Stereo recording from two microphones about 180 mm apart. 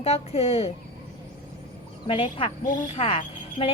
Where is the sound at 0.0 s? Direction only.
35° left (ahead or behind).